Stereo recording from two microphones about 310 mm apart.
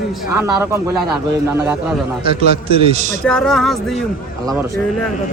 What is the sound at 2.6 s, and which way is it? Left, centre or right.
Speech, centre.